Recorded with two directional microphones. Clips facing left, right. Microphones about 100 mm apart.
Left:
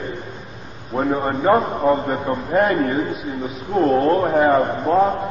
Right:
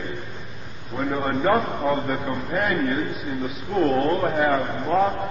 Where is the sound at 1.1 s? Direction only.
25° left (ahead or behind).